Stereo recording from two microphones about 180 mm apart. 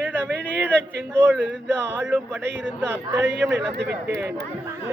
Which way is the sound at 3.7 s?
65° right (ahead or behind).